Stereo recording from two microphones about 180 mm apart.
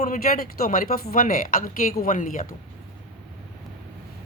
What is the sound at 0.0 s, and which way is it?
A woman's voice, 50° left (ahead or behind).